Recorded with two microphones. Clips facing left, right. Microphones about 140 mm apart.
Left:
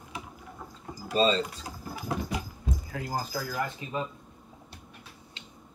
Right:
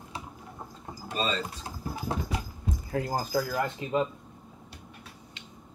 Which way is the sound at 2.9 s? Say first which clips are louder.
Right 6 dB; 30° right (ahead or behind).